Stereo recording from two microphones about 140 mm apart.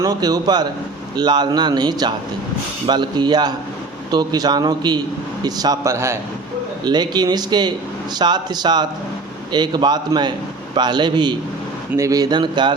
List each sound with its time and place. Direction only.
0.0 s a man's voice: 25° right (ahead or behind)